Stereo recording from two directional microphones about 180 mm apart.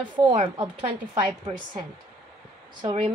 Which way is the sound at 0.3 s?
25° right (ahead or behind).